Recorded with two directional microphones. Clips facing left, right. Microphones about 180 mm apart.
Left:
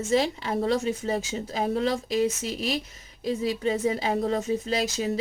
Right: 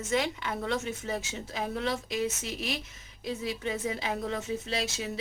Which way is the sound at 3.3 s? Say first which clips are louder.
Left 7 dB; 35° left (ahead or behind).